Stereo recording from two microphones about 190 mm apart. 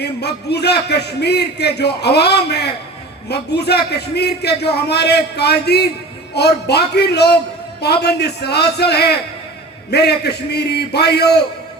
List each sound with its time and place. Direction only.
0.0 s a man's voice: 60° left (ahead or behind)